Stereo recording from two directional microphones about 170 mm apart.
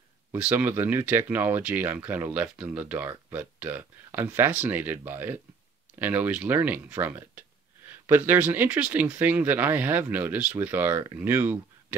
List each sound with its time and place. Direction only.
0.3 s speech: 10° right (ahead or behind)